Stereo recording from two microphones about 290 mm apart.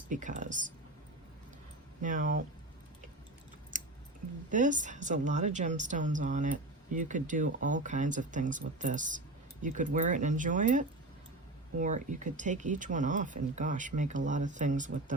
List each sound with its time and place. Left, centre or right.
0.1 s a woman's voice: right
2.0 s a woman's voice: right
3.7 s scissors: right
4.5 s a woman's voice: right